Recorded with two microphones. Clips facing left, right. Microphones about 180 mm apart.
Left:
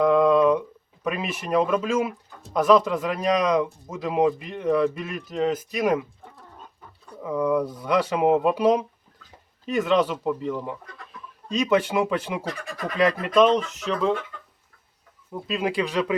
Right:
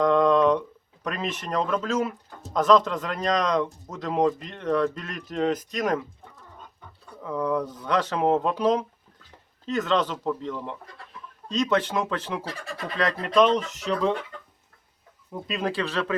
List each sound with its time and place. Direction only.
0.0 s a sound: 10° left (ahead or behind)
1.0 s speech: 10° left (ahead or behind)
7.2 s speech: 10° left (ahead or behind)
12.5 s speech: 30° right (ahead or behind)
13.0 s speech: 10° left (ahead or behind)
13.7 s speech: 35° right (ahead or behind)
15.3 s speech: centre (ahead or behind)
15.6 s speech: 15° left (ahead or behind)